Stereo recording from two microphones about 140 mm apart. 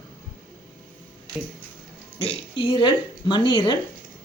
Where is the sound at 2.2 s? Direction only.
40° left (ahead or behind).